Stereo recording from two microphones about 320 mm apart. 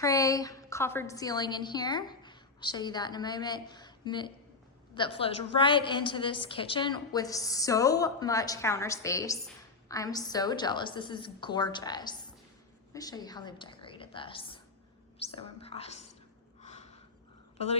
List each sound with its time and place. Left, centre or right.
0.0 s a woman's voice: centre